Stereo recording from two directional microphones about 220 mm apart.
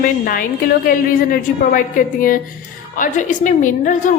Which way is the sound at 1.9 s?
40° left (ahead or behind).